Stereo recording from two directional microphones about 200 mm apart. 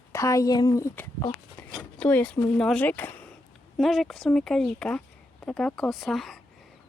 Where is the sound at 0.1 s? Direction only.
15° left (ahead or behind).